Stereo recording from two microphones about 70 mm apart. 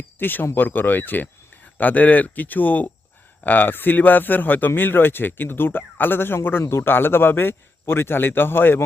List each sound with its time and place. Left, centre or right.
0.2 s speech: left